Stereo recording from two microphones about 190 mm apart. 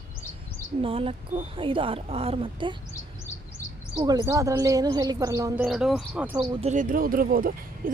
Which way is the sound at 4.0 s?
20° right (ahead or behind).